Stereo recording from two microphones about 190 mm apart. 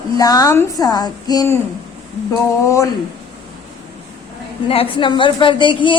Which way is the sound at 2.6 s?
15° left (ahead or behind).